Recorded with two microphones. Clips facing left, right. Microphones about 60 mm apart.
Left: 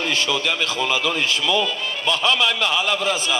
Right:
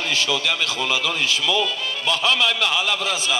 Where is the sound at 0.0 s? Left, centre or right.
Left.